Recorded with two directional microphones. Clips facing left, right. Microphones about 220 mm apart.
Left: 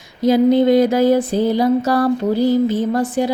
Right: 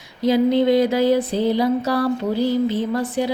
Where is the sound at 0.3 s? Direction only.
45° left (ahead or behind).